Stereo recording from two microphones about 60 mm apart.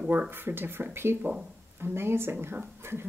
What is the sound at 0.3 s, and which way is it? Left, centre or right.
Speech, right.